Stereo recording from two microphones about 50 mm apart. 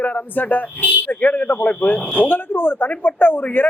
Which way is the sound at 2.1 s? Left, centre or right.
Left.